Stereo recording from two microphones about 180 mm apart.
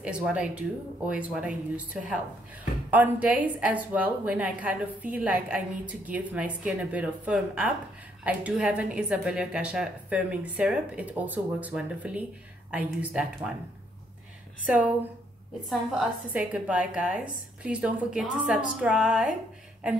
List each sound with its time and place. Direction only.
0.0 s a woman's voice: 5° right (ahead or behind)
14.7 s a woman's voice: 10° right (ahead or behind)